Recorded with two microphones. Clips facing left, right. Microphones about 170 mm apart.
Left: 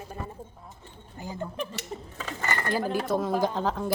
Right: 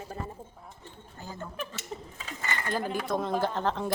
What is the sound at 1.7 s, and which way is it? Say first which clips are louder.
Cutlery: left 3 dB; 60° left (ahead or behind).